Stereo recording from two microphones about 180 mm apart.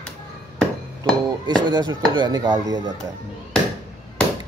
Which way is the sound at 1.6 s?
25° right (ahead or behind).